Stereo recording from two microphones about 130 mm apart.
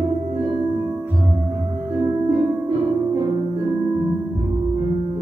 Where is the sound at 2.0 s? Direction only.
30° right (ahead or behind).